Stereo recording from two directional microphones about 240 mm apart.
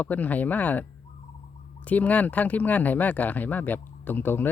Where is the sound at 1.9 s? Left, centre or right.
Centre.